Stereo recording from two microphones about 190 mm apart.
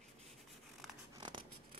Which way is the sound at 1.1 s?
25° right (ahead or behind).